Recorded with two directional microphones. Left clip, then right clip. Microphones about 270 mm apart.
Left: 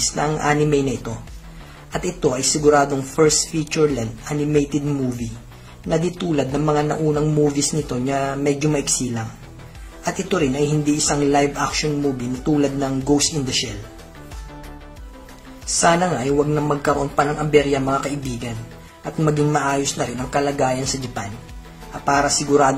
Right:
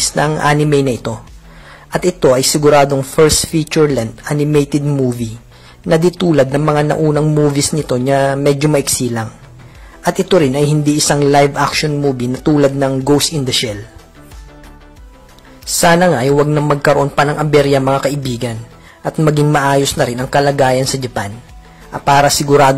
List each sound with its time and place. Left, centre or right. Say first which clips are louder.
0.1 s a man's voice: right 8 dB; right
15.6 s a man's voice: right 7 dB; right